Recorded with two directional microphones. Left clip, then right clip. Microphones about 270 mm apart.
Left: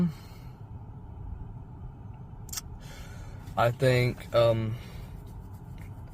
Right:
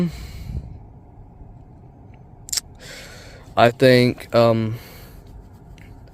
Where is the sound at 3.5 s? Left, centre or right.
Right.